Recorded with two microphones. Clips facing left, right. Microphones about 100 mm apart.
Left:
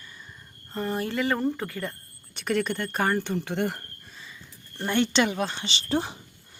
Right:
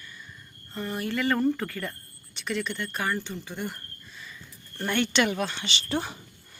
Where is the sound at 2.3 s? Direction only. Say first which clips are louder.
Left 5 dB; 50° left (ahead or behind).